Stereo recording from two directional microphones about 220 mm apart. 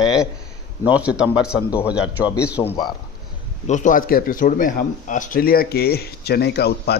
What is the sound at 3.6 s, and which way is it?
Speech, 35° left (ahead or behind).